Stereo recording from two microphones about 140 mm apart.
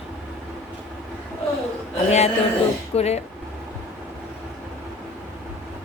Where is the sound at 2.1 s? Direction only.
50° left (ahead or behind).